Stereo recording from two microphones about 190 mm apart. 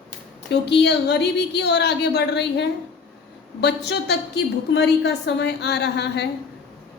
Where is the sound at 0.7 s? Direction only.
65° left (ahead or behind).